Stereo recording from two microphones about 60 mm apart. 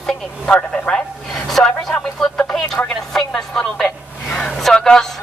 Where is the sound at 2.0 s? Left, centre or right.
Centre.